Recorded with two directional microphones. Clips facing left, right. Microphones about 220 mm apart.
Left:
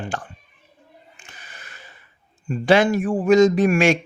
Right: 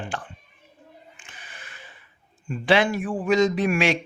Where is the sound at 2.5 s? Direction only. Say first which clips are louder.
Left 4 dB; 45° left (ahead or behind).